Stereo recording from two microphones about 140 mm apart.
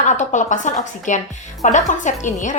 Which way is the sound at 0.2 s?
60° left (ahead or behind).